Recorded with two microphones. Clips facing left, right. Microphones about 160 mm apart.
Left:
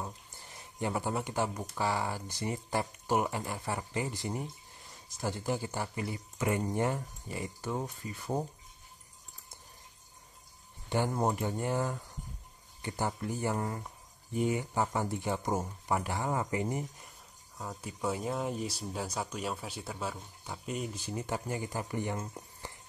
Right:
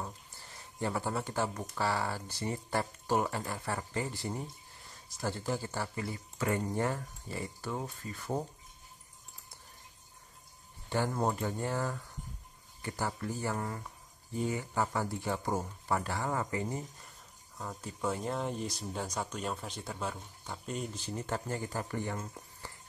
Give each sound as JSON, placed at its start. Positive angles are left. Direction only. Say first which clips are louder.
{"t": 0.0, "sound": "speech", "louder": "left 1 dB", "side_deg": 15}
{"t": 10.9, "sound": "speech", "louder": "left 1 dB", "side_deg": 15}